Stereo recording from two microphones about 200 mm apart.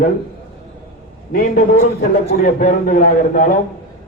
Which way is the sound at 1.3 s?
45° left (ahead or behind).